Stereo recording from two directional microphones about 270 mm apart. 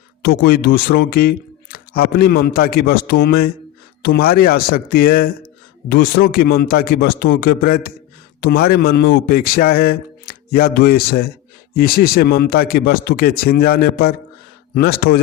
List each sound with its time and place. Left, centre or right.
0.2 s speech: left